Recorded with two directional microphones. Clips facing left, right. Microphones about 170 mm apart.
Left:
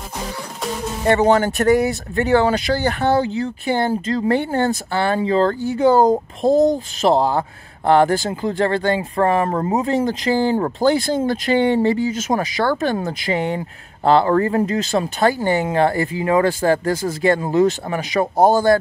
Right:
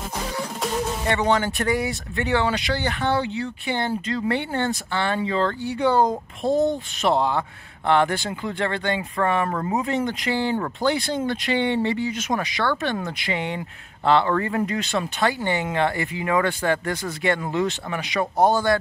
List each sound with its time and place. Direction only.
1.0 s speech: 40° left (ahead or behind)